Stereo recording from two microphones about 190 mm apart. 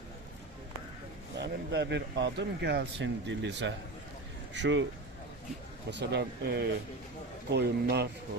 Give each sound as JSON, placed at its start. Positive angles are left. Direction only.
{"t": 1.4, "sound": "speech", "side_deg": -65}
{"t": 5.9, "sound": "speech", "side_deg": -65}